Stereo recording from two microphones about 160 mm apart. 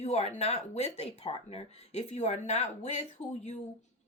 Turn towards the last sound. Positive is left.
turn(degrees=45)  # may be behind; listen again after turning